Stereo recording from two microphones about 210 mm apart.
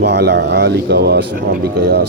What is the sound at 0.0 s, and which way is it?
Speech, 55° right (ahead or behind).